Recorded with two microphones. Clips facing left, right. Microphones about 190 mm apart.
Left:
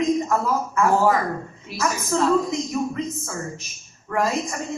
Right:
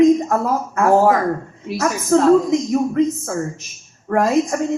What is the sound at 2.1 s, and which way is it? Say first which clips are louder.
Speech: right 8 dB; 50° right (ahead or behind).